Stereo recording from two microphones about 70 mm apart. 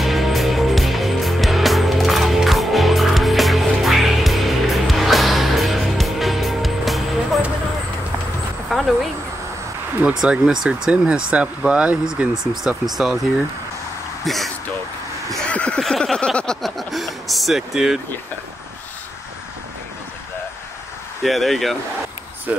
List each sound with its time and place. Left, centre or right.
0.0 s music: centre
8.6 s a sound: centre
10.0 s speech: centre
12.6 s speech: centre
14.2 s speech: centre
15.5 s a sound: centre
15.8 s a sound: centre
21.2 s speech: centre
22.5 s speech: right